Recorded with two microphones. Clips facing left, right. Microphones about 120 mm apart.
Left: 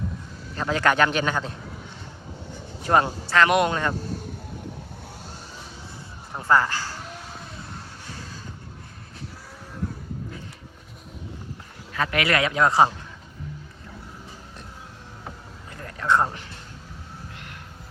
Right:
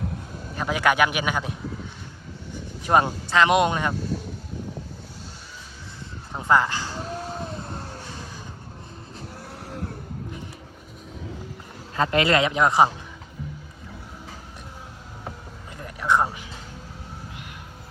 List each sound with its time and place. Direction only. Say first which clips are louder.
0.5 s speech: even; 10° right (ahead or behind)
2.8 s speech: right 1 dB; 15° right (ahead or behind)
6.5 s speech: even; 20° right (ahead or behind)
7.0 s vehicle: right 8 dB; 35° right (ahead or behind)
11.9 s speech: right 3 dB; 30° right (ahead or behind)
15.8 s a sound: even; 15° right (ahead or behind)